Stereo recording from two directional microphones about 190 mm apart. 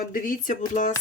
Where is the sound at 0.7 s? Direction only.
40° left (ahead or behind).